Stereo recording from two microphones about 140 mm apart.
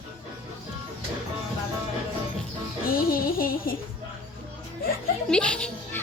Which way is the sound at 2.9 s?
90° left.